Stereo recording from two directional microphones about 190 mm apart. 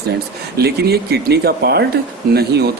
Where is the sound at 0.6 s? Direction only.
60° right (ahead or behind).